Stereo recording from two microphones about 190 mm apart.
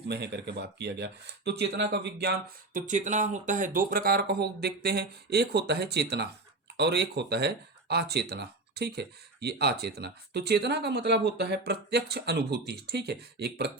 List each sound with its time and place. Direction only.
0.1 s speech: 60° right (ahead or behind)
2.7 s speech: 40° right (ahead or behind); by 13.7 s 60° right (ahead or behind)